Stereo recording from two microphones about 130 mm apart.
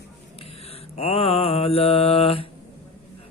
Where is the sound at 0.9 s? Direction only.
50° left (ahead or behind).